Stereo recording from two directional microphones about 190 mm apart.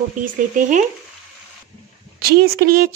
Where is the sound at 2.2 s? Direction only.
55° right (ahead or behind).